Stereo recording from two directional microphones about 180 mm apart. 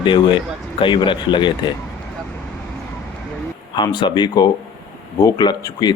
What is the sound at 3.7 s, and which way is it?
Speech, 25° left (ahead or behind).